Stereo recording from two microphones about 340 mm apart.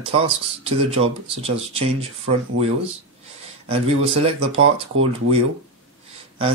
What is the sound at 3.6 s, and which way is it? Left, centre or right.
Speech, centre.